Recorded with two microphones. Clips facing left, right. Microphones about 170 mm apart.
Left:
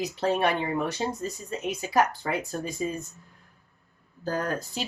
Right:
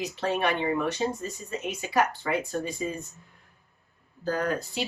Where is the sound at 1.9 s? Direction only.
40° left (ahead or behind).